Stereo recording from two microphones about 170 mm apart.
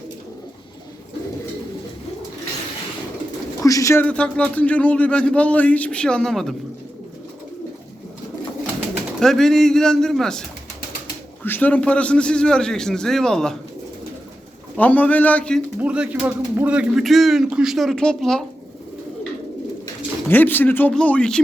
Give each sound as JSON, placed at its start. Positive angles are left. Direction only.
{"t": 3.6, "sound": "a man's voice", "side_deg": 20}
{"t": 9.2, "sound": "speech", "side_deg": 0}
{"t": 11.4, "sound": "speech", "side_deg": 10}
{"t": 14.8, "sound": "a man's voice", "side_deg": 10}
{"t": 15.8, "sound": "speech", "side_deg": -5}
{"t": 20.2, "sound": "a man's voice", "side_deg": 10}